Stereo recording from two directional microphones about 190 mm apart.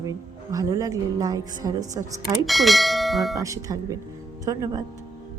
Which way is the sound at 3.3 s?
15° right (ahead or behind).